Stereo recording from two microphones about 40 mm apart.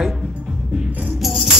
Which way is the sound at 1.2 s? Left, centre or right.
Centre.